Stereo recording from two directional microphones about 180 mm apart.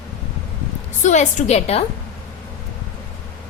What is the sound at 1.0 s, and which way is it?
Speech, 40° left (ahead or behind).